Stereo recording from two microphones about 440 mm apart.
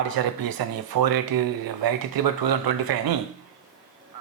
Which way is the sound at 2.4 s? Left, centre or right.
Right.